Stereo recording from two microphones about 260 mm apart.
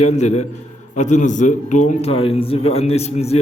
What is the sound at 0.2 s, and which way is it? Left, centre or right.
A man's voice, left.